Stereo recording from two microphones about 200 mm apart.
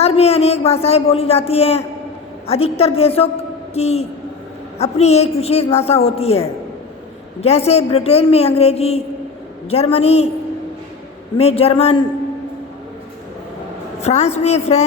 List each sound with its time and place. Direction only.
0.0 s a man's voice: 30° left (ahead or behind)
11.3 s a woman's voice: 30° left (ahead or behind)
14.0 s a man's voice: 35° left (ahead or behind)